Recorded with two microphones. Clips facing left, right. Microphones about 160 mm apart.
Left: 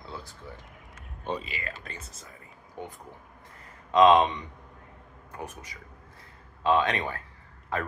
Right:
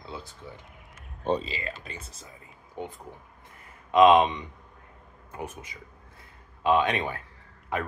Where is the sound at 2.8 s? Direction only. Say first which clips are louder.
Right 3 dB; 20° right (ahead or behind).